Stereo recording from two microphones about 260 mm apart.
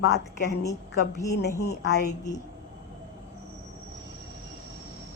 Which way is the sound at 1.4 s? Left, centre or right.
Left.